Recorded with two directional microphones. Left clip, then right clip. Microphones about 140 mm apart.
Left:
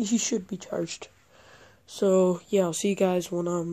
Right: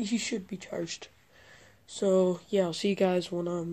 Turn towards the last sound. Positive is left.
turn(degrees=40)  # may be behind; listen again after turning